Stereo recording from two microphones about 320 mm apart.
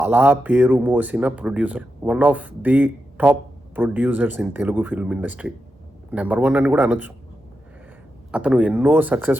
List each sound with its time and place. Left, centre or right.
0.0 s speech: centre
8.3 s speech: centre